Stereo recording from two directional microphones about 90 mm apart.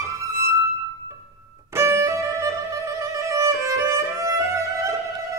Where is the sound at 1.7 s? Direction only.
30° right (ahead or behind).